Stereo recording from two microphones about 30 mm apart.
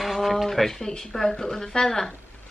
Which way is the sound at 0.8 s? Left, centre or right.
Centre.